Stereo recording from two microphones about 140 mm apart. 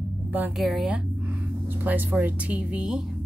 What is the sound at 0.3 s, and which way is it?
Speech, 10° right (ahead or behind).